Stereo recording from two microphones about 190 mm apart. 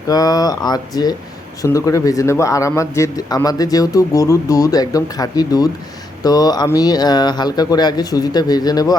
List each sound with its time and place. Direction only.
0.1 s a man's voice: 20° left (ahead or behind)